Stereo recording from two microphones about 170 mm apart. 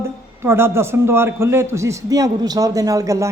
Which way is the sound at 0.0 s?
15° right (ahead or behind).